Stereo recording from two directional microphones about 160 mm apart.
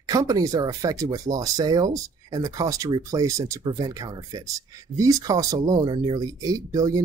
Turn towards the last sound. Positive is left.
turn(degrees=-20)  # may be behind; listen again after turning